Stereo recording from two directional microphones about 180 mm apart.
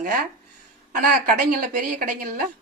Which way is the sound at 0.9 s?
50° right (ahead or behind).